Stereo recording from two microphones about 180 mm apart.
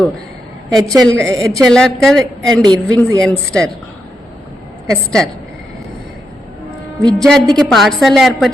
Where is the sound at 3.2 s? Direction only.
5° left (ahead or behind).